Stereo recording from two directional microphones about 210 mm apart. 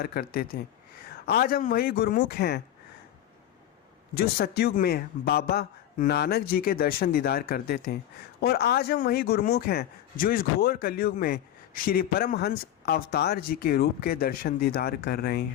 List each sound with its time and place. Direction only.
0.0 s speech: 45° left (ahead or behind)
4.1 s speech: 45° left (ahead or behind)